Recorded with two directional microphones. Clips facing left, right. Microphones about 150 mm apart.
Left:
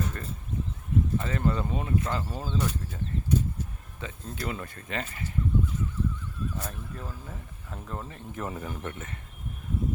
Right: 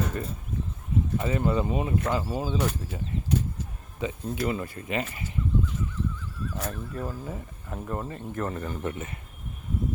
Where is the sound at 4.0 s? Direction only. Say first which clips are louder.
Right 7 dB; 15° right (ahead or behind).